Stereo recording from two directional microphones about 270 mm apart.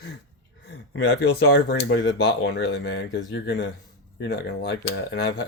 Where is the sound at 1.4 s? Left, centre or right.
Left.